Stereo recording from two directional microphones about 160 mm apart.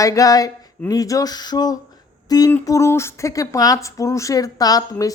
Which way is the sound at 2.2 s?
25° left (ahead or behind).